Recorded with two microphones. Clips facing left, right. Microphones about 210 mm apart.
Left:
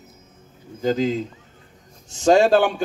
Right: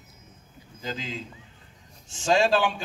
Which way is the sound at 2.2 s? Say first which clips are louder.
Left 7 dB; 45° left (ahead or behind).